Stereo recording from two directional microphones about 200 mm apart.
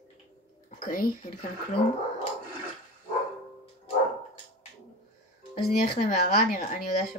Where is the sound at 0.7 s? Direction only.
45° left (ahead or behind).